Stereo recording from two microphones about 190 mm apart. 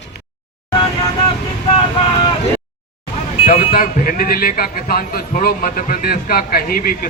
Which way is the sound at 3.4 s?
45° left (ahead or behind).